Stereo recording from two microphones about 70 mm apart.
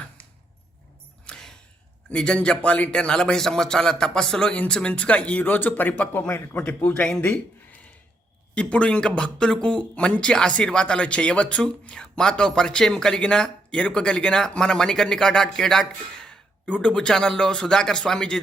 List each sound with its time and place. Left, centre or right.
1.3 s a sound: centre
2.0 s a man's voice: centre
8.5 s speech: centre